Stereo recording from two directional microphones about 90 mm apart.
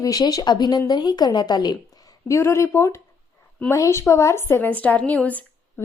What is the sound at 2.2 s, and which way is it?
A woman's voice, 35° left (ahead or behind).